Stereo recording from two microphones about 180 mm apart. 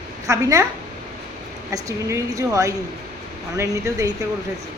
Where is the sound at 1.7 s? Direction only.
15° right (ahead or behind).